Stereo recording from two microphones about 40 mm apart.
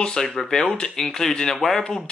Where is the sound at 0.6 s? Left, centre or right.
Left; by 1.8 s centre.